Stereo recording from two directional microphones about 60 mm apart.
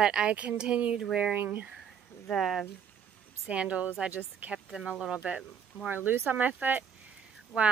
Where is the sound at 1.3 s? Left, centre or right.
Right.